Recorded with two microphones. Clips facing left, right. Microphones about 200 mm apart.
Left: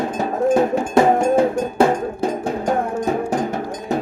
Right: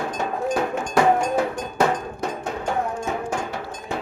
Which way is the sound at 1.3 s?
30° left (ahead or behind).